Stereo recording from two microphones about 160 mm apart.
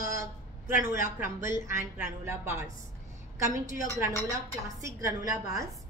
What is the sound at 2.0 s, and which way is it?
Speech, 15° right (ahead or behind).